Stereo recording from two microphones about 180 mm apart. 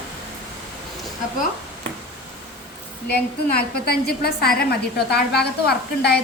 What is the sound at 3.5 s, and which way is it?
A woman's voice, 60° left (ahead or behind).